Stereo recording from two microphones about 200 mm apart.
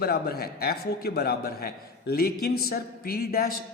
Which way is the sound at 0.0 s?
50° left (ahead or behind).